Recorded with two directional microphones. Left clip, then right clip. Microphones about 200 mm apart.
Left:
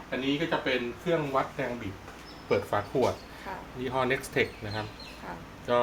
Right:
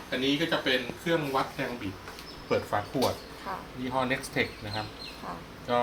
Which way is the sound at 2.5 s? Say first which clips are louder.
Left 1 dB; 30° left (ahead or behind).